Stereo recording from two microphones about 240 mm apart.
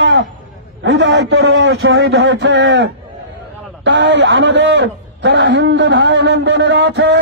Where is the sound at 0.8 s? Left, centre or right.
Right.